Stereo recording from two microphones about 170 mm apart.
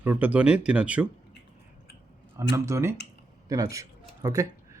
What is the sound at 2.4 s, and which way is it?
A man's voice, 15° right (ahead or behind).